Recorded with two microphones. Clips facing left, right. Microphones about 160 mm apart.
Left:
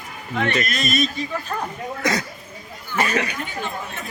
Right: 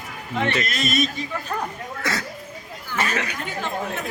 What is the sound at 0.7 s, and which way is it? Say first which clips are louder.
Speech: even; 25° right (ahead or behind).